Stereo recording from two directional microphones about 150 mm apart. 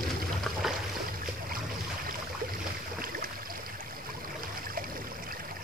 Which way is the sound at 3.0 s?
70° right (ahead or behind).